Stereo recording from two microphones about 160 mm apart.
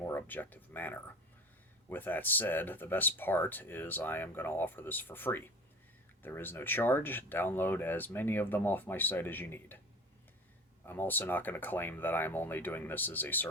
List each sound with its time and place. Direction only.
0.0 s speech: 15° left (ahead or behind)
10.8 s speech: 10° left (ahead or behind)